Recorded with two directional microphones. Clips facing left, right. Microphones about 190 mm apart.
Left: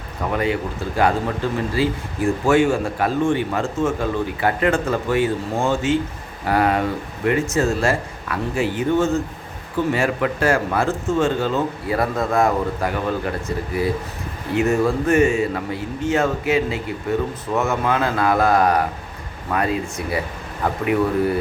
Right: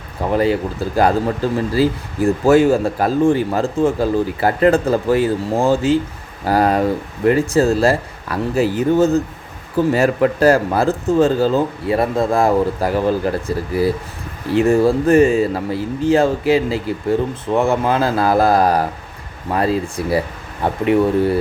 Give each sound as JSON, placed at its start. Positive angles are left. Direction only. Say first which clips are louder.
{"t": 0.2, "sound": "speech", "louder": "right 5 dB", "side_deg": -30}
{"t": 14.5, "sound": "speech", "louder": "right 5 dB", "side_deg": -30}